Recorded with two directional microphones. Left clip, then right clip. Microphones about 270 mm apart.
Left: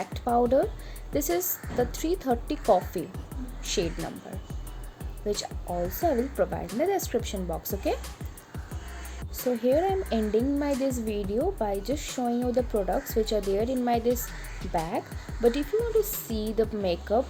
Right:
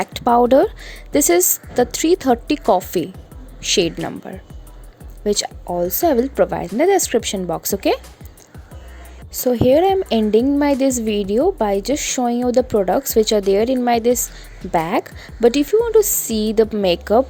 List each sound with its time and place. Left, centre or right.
0.0 s a woman's voice: right
9.3 s a woman's voice: right